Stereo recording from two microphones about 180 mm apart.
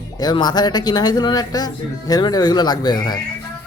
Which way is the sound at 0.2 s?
20° left (ahead or behind).